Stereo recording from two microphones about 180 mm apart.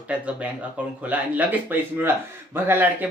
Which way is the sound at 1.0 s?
10° right (ahead or behind).